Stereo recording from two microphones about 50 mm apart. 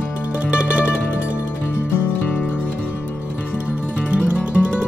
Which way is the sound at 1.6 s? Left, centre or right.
Left.